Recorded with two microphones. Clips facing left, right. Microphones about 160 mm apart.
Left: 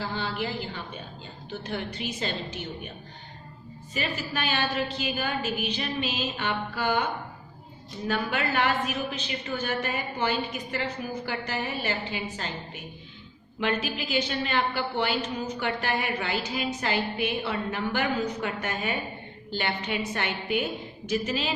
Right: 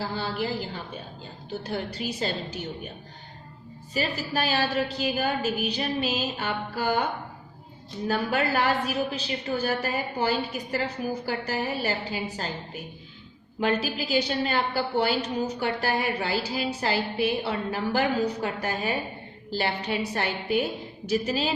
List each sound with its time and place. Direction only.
0.0 s a woman's voice: 40° right (ahead or behind)
3.9 s a woman's voice: 35° right (ahead or behind)
8.0 s a woman's voice: 35° right (ahead or behind)